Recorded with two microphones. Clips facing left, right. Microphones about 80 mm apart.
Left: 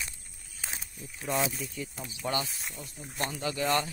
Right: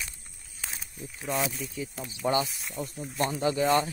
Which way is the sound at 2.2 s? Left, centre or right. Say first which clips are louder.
Right 6 dB; right.